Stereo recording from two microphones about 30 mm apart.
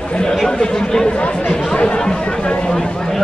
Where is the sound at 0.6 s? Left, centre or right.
Left.